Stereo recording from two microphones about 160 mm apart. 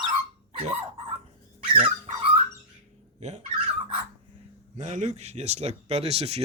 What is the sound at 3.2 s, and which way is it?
Speech, 45° right (ahead or behind).